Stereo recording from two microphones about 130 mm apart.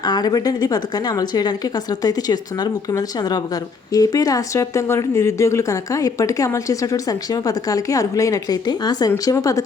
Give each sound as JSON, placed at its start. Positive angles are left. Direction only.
{"t": 0.0, "sound": "speech", "side_deg": 30}